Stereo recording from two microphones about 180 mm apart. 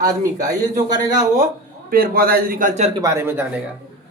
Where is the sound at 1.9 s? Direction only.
55° right (ahead or behind).